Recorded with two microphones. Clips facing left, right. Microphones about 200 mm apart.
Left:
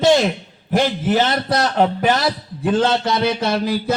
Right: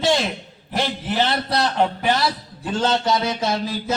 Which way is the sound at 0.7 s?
50° left (ahead or behind).